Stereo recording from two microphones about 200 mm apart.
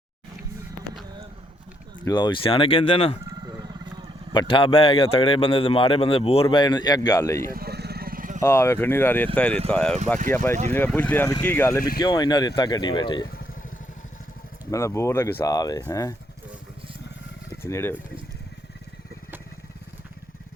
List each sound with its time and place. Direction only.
2.0 s speech: 20° left (ahead or behind)
3.2 s a sound: 20° right (ahead or behind)
4.3 s speech: 25° left (ahead or behind)
7.5 s vehicle: 50° right (ahead or behind)
8.4 s speech: 15° left (ahead or behind)
14.7 s speech: 15° left (ahead or behind)
17.6 s speech: 15° left (ahead or behind)